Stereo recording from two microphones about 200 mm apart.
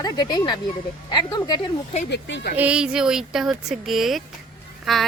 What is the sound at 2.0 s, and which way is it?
Speech, 60° left (ahead or behind).